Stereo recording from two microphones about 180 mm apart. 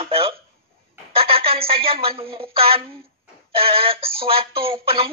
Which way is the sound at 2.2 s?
30° right (ahead or behind).